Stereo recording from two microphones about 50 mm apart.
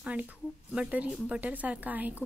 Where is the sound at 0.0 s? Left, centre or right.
Right.